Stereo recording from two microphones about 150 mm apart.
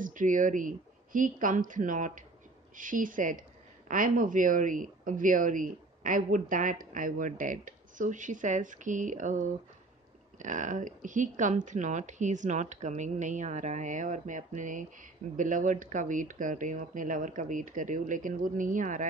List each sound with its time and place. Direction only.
0.0 s speech: 60° right (ahead or behind)
10.4 s speech: 55° right (ahead or behind)